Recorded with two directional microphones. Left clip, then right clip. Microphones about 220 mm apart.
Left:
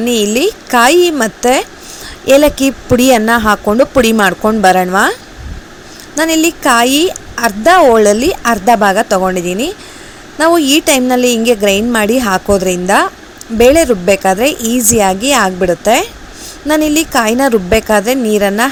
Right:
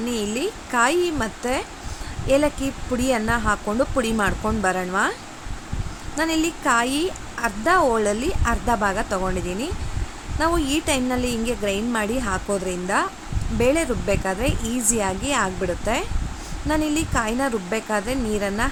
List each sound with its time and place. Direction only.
0.0 s speech: 30° left (ahead or behind)
6.1 s speech: 30° left (ahead or behind)